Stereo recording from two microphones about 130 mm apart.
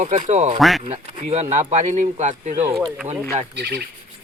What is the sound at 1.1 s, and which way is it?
Speech, 60° right (ahead or behind).